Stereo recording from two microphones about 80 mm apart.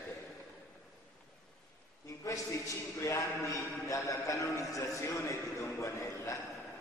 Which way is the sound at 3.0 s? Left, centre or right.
Left.